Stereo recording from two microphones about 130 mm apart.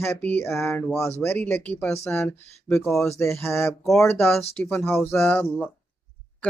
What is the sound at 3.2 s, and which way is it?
Speech, 20° left (ahead or behind).